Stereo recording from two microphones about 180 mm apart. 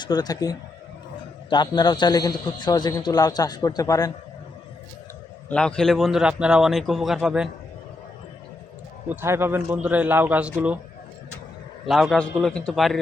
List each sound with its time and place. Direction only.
0.0 s a man's voice: 25° left (ahead or behind)
5.5 s a man's voice: 5° left (ahead or behind)
9.0 s a man's voice: 15° right (ahead or behind)
11.9 s a man's voice: centre (ahead or behind)